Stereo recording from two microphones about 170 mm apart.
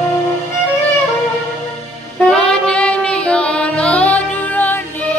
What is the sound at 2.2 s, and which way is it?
Music, 5° left (ahead or behind).